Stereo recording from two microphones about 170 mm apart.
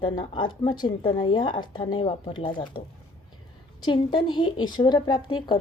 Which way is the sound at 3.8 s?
30° left (ahead or behind).